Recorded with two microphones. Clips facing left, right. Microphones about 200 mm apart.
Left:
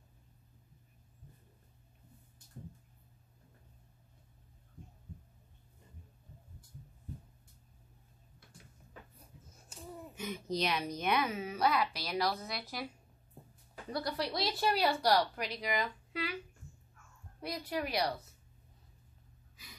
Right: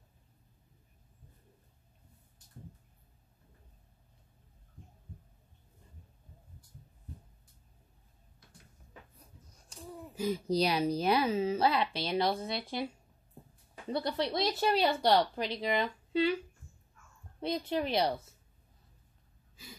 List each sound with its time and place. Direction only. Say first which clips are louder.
10.1 s speech: right 7 dB; 35° right (ahead or behind)
13.8 s speech: right 4 dB; 25° right (ahead or behind)
17.4 s speech: right 5 dB; 25° right (ahead or behind)
19.5 s gasp: right 7 dB; 30° right (ahead or behind)